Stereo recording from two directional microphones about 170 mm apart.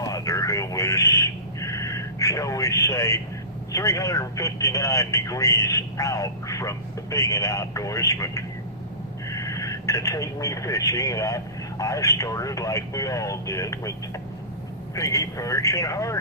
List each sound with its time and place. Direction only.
0.0 s a sound: 20° left (ahead or behind)
3.7 s speech: 20° left (ahead or behind)
14.9 s speech: 20° left (ahead or behind)